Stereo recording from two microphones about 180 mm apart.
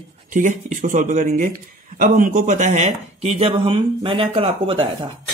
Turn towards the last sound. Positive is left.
turn(degrees=-30)  # may be behind; listen again after turning